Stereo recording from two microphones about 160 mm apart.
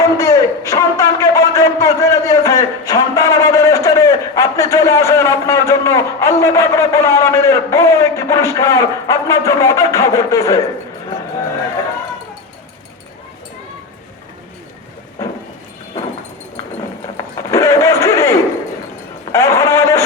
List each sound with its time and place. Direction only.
0.0 s a man's voice: 20° left (ahead or behind)
15.9 s clip-clop: 20° left (ahead or behind)
17.5 s a sound: 20° left (ahead or behind)